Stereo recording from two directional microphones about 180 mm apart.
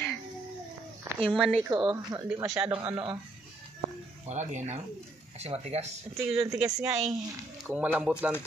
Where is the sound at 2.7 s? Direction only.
25° right (ahead or behind).